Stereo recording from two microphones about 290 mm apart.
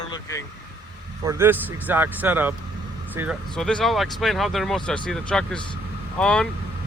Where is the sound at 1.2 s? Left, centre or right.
Centre.